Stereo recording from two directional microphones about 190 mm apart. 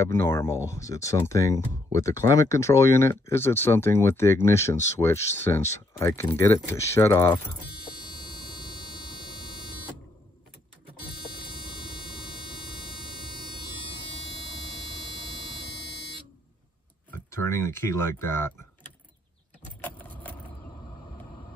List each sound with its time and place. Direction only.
0.0 s speech: 15° left (ahead or behind)
17.3 s speech: 15° left (ahead or behind)
19.8 s keys jangling: 10° left (ahead or behind)